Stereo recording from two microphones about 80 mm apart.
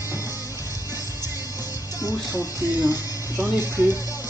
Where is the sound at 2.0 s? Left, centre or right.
Left.